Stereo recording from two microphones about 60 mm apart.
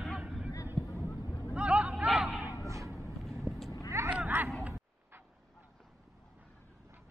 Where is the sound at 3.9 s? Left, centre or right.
Right.